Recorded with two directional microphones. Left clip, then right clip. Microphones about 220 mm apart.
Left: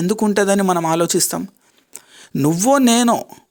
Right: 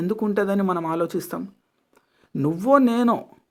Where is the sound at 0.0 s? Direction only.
35° left (ahead or behind).